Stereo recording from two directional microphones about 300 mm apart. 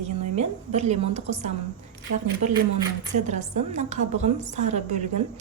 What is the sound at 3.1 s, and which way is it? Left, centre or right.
A woman's voice, right.